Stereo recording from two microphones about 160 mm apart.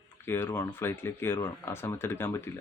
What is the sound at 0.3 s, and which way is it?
Speech, 15° left (ahead or behind).